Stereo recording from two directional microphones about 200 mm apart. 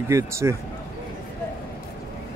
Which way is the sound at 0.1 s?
15° right (ahead or behind).